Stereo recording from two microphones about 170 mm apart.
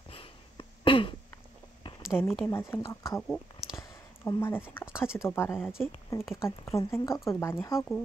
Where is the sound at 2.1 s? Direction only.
5° left (ahead or behind).